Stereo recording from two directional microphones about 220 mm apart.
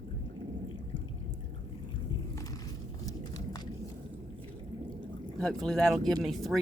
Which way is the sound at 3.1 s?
15° left (ahead or behind).